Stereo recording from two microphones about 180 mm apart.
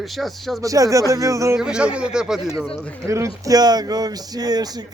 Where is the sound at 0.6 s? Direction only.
20° right (ahead or behind).